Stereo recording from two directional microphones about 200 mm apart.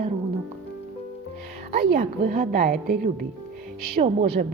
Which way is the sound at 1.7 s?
50° right (ahead or behind).